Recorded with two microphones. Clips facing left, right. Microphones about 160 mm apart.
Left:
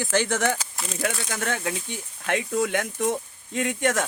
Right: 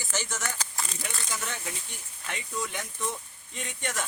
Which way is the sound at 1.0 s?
85° left.